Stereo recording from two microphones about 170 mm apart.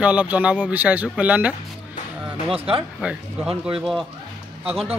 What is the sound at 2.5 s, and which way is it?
Speech, 35° right (ahead or behind).